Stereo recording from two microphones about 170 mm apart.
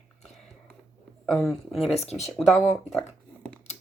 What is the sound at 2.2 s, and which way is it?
Speech, centre (ahead or behind).